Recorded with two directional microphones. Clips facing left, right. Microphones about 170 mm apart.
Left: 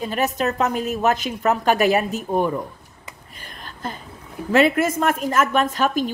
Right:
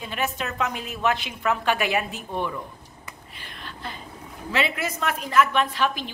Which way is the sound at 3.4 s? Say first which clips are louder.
Left 5 dB; 45° left (ahead or behind).